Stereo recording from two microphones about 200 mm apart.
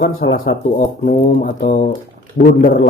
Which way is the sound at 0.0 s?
60° left (ahead or behind).